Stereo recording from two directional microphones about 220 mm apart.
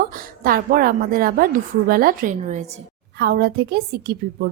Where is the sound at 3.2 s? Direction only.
45° right (ahead or behind).